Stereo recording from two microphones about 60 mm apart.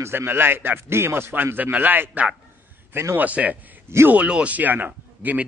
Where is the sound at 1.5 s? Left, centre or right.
Right.